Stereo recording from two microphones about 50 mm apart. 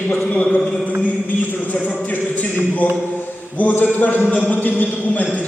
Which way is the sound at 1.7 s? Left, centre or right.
Left.